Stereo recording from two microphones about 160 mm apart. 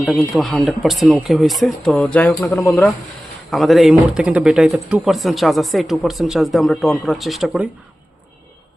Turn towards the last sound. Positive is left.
turn(degrees=0)  # may be behind; listen again after turning